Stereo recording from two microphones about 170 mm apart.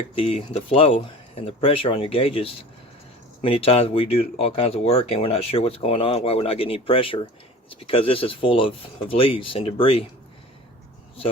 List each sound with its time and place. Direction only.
0.2 s speech: 35° left (ahead or behind)